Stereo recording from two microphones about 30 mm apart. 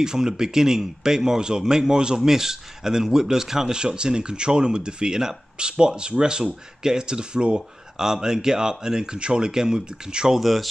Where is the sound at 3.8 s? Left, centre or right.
Right.